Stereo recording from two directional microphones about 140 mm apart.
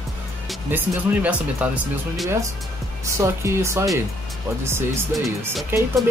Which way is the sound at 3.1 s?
20° right (ahead or behind).